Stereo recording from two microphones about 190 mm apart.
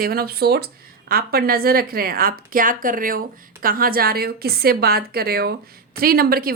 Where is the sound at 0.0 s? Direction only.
55° right (ahead or behind).